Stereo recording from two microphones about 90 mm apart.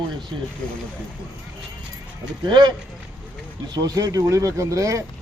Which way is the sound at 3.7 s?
45° right (ahead or behind).